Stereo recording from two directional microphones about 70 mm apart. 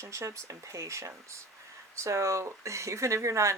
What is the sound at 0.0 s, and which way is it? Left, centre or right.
Speech, right.